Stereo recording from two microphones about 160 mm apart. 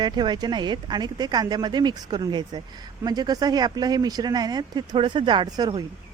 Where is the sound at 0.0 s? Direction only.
25° right (ahead or behind).